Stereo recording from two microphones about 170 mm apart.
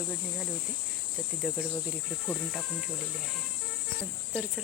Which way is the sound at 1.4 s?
Centre (ahead or behind).